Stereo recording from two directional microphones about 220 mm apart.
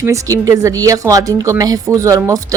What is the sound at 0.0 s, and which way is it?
Speech, 15° right (ahead or behind).